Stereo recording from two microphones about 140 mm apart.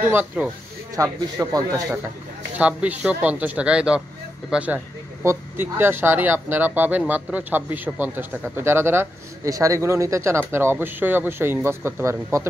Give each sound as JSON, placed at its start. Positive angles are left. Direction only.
{"t": 0.1, "sound": "a man's voice", "side_deg": -10}
{"t": 0.9, "sound": "speech", "side_deg": -25}
{"t": 2.5, "sound": "a man's voice", "side_deg": -10}